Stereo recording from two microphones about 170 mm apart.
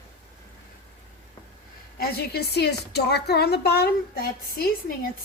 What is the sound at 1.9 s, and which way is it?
A woman's voice, 70° left (ahead or behind).